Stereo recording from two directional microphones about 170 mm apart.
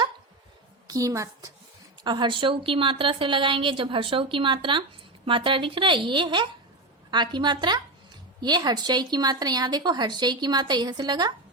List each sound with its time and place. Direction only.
0.9 s speech: 20° right (ahead or behind)